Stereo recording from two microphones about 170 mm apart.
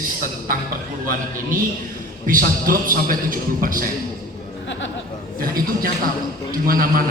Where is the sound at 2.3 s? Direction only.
55° right (ahead or behind).